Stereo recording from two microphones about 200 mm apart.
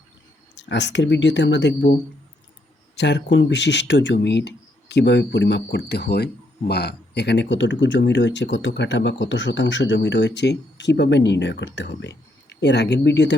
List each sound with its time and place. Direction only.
0.5 s speech: 60° left (ahead or behind)